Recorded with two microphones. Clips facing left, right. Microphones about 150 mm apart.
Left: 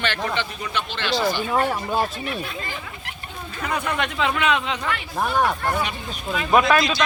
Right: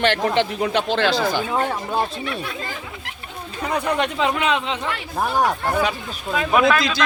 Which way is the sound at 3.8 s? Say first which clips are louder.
Right 4 dB; 35° right (ahead or behind).